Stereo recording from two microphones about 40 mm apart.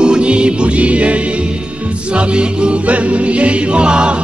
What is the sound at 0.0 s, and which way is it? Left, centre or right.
Music, right.